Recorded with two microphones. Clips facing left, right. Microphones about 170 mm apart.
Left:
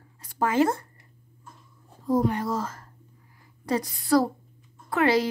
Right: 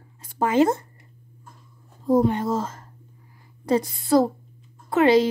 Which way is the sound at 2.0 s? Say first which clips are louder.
Right 4 dB; 25° right (ahead or behind).